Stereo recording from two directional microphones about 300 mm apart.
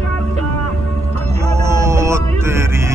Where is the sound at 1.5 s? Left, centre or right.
Centre.